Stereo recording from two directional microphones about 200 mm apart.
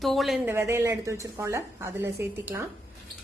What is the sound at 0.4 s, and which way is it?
A woman's voice, 10° right (ahead or behind).